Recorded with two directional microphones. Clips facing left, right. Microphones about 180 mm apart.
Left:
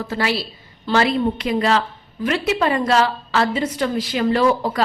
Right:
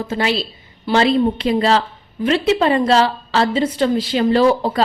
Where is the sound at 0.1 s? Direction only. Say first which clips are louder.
Right 3 dB; 20° right (ahead or behind).